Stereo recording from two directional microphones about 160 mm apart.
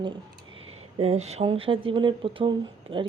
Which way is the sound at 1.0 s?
40° right (ahead or behind).